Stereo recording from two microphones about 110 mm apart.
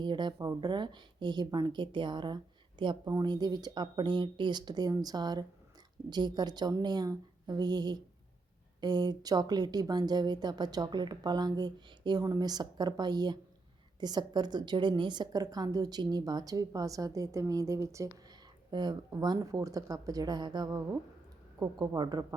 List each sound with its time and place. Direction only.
0.0 s speech: 45° right (ahead or behind)
3.0 s a woman's voice: 35° right (ahead or behind)
18.1 s a woman's voice: 40° right (ahead or behind)